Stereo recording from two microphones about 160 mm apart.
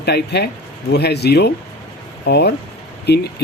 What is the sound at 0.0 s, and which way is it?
Speech, 90° left.